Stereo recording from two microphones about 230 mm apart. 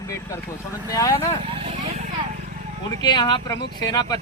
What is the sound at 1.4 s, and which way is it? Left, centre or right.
Vehicle, right.